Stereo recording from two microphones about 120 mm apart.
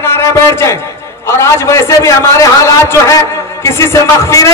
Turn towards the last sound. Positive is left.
turn(degrees=25)  # may be behind; listen again after turning